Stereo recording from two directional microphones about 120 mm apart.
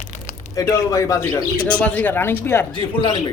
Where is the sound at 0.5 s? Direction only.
25° left (ahead or behind).